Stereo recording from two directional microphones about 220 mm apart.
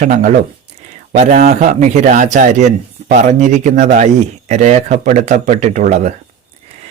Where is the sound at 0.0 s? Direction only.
35° right (ahead or behind).